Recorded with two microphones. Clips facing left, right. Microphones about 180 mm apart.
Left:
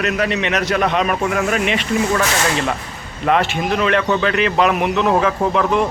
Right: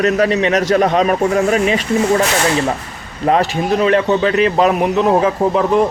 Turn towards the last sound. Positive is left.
turn(degrees=-35)  # may be behind; listen again after turning